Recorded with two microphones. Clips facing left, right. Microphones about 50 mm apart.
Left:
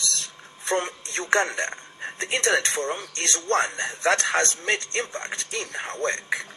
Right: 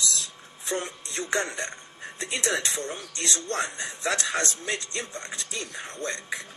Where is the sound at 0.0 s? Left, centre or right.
Left.